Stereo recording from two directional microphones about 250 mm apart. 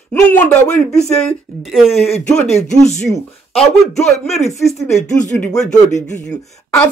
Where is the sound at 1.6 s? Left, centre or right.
Centre.